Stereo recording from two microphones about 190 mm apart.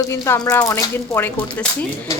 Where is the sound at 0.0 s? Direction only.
15° left (ahead or behind).